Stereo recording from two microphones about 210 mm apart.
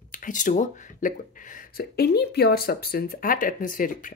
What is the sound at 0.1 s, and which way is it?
Speech, 40° left (ahead or behind).